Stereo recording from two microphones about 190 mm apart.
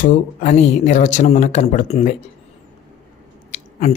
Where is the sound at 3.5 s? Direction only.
35° left (ahead or behind).